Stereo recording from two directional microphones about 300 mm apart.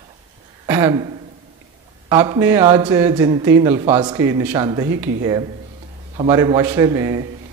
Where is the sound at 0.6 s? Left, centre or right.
Centre.